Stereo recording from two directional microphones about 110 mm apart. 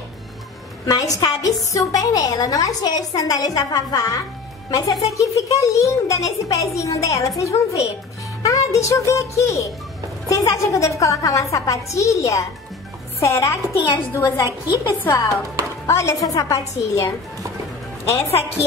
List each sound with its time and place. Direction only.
0.8 s a woman's voice: 35° left (ahead or behind)
15.0 s a woman's voice: 30° left (ahead or behind)
18.1 s a woman's voice: 25° left (ahead or behind)